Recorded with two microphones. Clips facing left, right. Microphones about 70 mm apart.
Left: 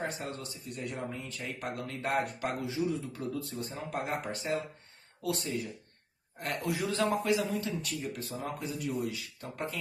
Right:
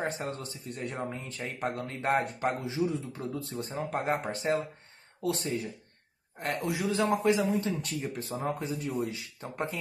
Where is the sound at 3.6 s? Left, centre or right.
Right.